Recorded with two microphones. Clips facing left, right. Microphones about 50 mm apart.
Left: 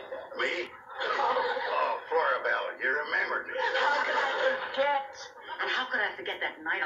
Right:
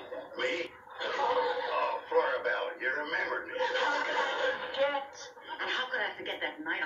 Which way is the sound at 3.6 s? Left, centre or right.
Left.